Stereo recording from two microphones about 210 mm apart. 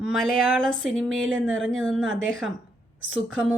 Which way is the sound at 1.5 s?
70° right (ahead or behind).